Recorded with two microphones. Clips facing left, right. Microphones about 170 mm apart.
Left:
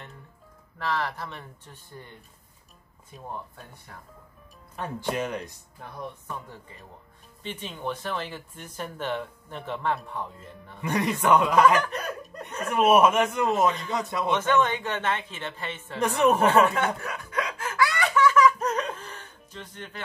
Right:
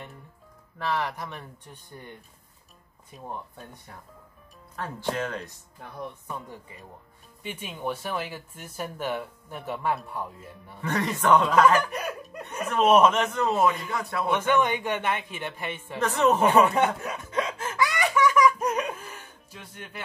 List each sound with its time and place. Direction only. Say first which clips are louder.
0.7 s speech: right 1 dB; 15° right (ahead or behind)
4.7 s a man's voice: left 1 dB; 15° left (ahead or behind)
7.4 s speech: right 1 dB; 10° right (ahead or behind)
10.8 s a man's voice: left 1 dB; 15° left (ahead or behind)
11.8 s chuckle: even; 10° right (ahead or behind)
12.6 s a man's voice: even; 10° left (ahead or behind)
14.3 s speech: even; 15° right (ahead or behind)
16.0 s a man's voice: left 1 dB; 15° left (ahead or behind)
16.3 s laughter: right 1 dB; 15° right (ahead or behind)